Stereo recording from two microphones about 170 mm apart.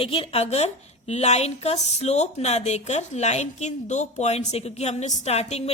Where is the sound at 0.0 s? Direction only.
35° left (ahead or behind).